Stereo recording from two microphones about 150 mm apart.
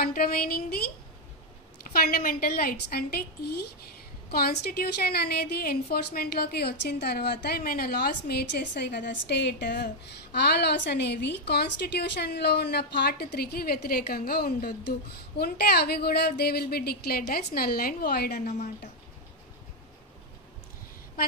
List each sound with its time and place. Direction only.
0.0 s a woman's voice: 80° left
1.9 s a woman's voice: 80° left